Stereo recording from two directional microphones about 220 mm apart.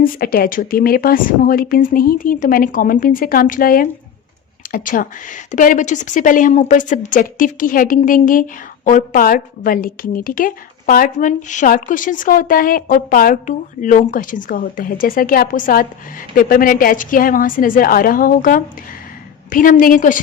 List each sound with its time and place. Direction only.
0.0 s a woman's voice: 45° left (ahead or behind)